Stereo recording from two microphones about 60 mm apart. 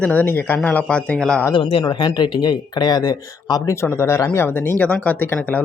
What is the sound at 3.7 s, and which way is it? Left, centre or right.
Speech, left.